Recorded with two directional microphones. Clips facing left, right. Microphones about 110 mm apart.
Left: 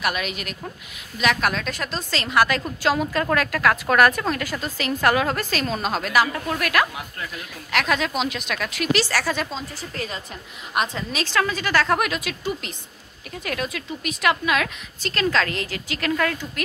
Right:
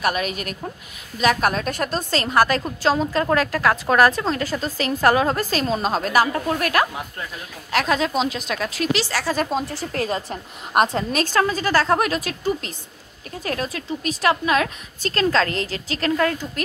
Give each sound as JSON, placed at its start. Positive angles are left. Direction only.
{"t": 0.0, "sound": "a woman's voice", "side_deg": -40}
{"t": 8.9, "sound": "a woman's voice", "side_deg": -20}
{"t": 9.5, "sound": "speech", "side_deg": -60}
{"t": 10.7, "sound": "a woman's voice", "side_deg": -45}